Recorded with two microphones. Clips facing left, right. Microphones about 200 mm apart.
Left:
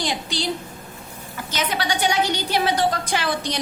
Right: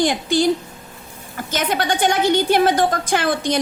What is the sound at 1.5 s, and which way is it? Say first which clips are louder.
A woman's voice: right 4 dB; 50° right (ahead or behind).